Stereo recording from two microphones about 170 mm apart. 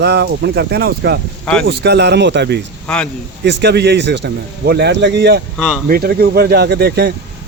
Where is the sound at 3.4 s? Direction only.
85° right.